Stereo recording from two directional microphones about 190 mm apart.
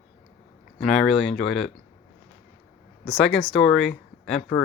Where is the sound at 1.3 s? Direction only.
35° left (ahead or behind).